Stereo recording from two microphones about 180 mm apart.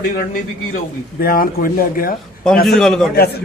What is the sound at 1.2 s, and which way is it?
Speech, 50° left (ahead or behind).